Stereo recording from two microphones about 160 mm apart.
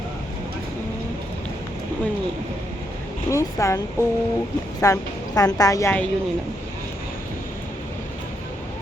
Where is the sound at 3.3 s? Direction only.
20° left (ahead or behind).